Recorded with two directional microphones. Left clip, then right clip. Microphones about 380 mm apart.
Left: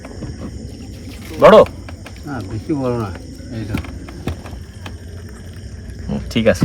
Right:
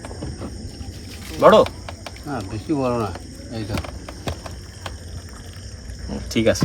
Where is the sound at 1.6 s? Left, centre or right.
Centre.